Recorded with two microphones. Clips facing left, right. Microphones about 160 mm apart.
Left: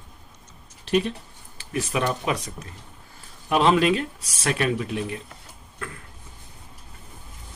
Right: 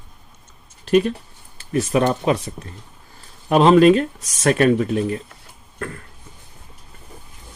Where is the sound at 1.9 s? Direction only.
40° right (ahead or behind).